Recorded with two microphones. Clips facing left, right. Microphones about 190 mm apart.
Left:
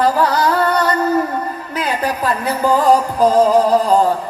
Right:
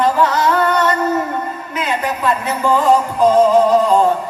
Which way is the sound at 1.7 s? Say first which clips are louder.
Left 1 dB; 35° left (ahead or behind).